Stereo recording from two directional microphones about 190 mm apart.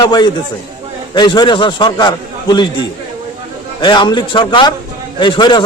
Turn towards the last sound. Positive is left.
turn(degrees=25)  # may be behind; listen again after turning